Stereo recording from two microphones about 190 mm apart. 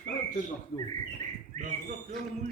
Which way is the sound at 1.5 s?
45° right (ahead or behind).